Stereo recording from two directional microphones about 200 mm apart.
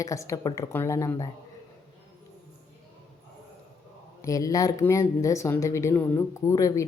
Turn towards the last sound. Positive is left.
turn(degrees=15)  # may be behind; listen again after turning